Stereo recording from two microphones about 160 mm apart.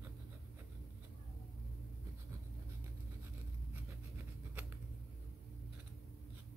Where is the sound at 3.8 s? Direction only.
15° right (ahead or behind).